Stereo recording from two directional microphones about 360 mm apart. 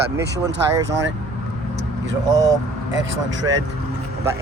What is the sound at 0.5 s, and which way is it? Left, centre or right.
Speech, right.